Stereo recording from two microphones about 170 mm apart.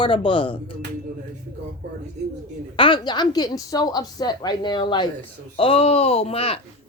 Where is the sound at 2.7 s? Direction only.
30° left (ahead or behind).